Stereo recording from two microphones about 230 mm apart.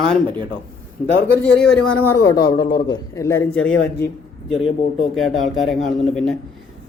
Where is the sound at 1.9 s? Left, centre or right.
Centre.